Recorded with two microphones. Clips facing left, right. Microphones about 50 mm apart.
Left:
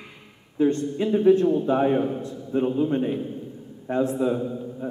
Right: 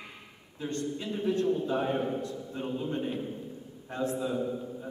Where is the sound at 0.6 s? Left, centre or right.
Left.